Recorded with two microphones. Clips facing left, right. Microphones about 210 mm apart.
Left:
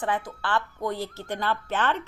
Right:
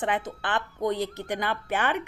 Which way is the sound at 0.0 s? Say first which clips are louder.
Even; 20° right (ahead or behind).